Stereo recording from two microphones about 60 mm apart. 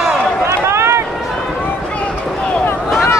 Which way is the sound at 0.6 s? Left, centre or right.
Right.